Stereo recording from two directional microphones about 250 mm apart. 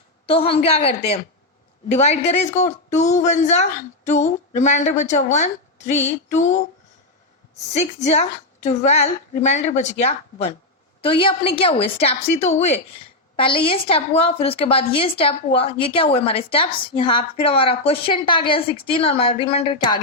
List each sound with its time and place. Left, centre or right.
0.3 s a woman's voice: left
8.0 s a woman's voice: left